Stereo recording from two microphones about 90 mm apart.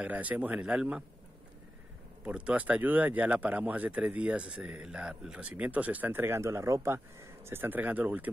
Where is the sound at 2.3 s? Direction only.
15° right (ahead or behind).